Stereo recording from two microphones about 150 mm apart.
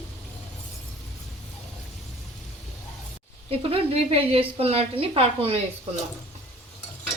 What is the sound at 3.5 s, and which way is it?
A woman's voice, 40° right (ahead or behind).